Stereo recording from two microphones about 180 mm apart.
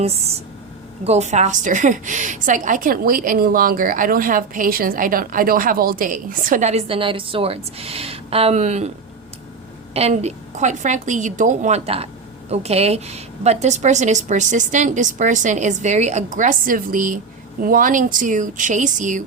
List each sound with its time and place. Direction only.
0.0 s a woman's voice: 35° right (ahead or behind)
9.9 s a woman's voice: 35° right (ahead or behind)